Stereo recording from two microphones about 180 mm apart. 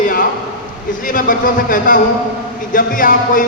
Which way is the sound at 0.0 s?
50° left (ahead or behind).